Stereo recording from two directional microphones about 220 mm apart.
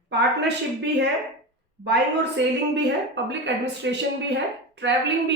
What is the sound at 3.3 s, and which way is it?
A woman's voice, 55° right (ahead or behind).